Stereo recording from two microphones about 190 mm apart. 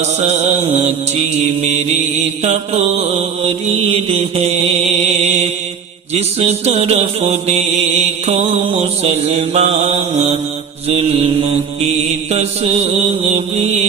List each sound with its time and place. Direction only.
0.0 s mantra: 35° right (ahead or behind)
2.4 s mantra: 35° right (ahead or behind)
4.1 s mantra: 30° right (ahead or behind)
12.3 s mantra: 35° right (ahead or behind)